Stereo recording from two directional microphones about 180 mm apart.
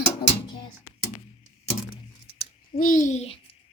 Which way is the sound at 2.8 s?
45° left (ahead or behind).